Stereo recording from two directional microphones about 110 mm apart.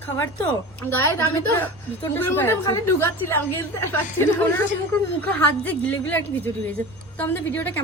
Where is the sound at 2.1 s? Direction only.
20° left (ahead or behind).